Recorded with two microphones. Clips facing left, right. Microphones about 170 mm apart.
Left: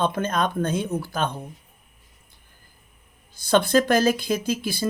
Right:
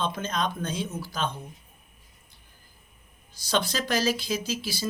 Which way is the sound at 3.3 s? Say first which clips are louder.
Left 9 dB; 55° left (ahead or behind).